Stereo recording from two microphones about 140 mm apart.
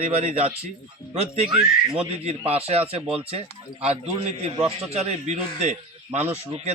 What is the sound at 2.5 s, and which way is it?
Speech, 45° right (ahead or behind).